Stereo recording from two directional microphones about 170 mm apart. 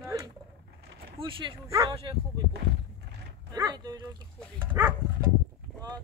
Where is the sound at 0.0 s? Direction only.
20° right (ahead or behind).